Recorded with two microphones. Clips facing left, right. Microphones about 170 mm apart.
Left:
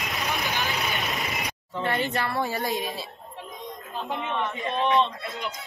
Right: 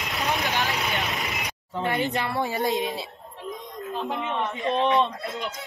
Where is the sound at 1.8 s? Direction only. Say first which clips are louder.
Right 1 dB; 15° right (ahead or behind).